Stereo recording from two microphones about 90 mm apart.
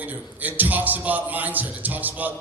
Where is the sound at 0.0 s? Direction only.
20° right (ahead or behind).